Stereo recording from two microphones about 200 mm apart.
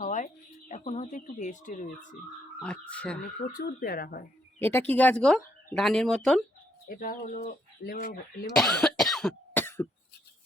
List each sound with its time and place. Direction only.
0.0 s a sound: 40° left (ahead or behind)
0.7 s speech: 35° left (ahead or behind)
2.6 s speech: 5° left (ahead or behind)
3.6 s speech: 50° left (ahead or behind)
4.6 s speech: 10° left (ahead or behind)
6.8 s speech: 45° left (ahead or behind)
8.5 s cough: centre (ahead or behind)